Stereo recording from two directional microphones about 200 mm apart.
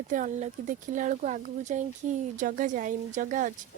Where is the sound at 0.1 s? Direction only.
40° right (ahead or behind).